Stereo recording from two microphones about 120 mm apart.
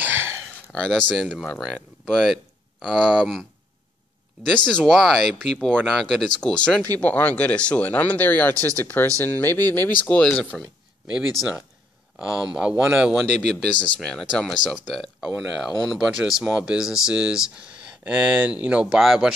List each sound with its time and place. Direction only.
0.0 s a sound: 15° right (ahead or behind)
0.7 s speech: 10° left (ahead or behind)
4.6 s speech: 5° left (ahead or behind)
13.4 s speech: 10° left (ahead or behind)